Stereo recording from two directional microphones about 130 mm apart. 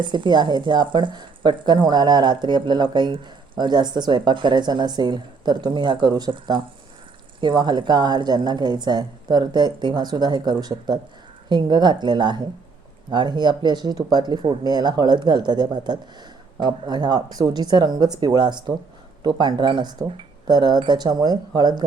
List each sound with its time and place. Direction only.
0.0 s speech: 35° right (ahead or behind)